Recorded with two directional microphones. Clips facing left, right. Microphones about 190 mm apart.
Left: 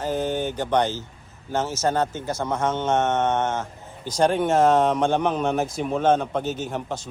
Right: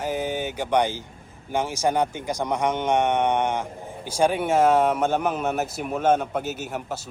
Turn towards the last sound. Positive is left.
turn(degrees=-10)  # may be behind; listen again after turning